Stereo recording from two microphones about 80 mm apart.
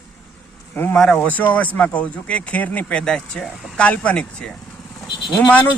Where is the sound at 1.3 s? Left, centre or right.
Left.